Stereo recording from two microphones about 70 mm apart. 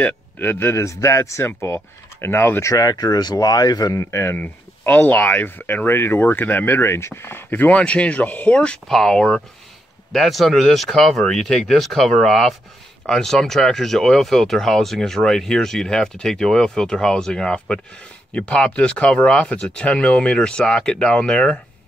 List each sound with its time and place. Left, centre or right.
0.0 s speech: left
2.7 s speech: left
3.9 s speech: left
4.4 s speech: left